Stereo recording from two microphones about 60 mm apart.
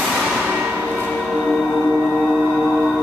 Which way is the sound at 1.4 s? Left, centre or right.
Centre.